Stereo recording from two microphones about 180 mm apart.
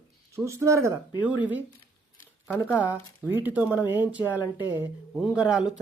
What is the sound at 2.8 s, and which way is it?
Speech, 10° right (ahead or behind).